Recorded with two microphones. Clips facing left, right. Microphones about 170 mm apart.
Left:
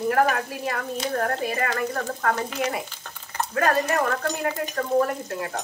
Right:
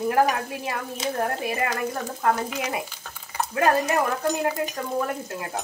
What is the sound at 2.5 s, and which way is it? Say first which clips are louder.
Stir: left 2 dB; 5° right (ahead or behind).